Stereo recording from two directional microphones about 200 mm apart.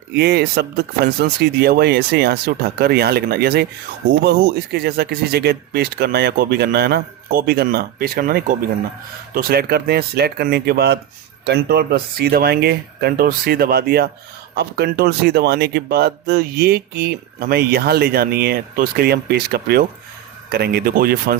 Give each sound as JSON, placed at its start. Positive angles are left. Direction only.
{"t": 0.2, "sound": "speech", "side_deg": -55}